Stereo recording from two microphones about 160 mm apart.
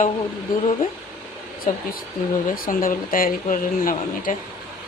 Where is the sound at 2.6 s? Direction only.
60° left (ahead or behind).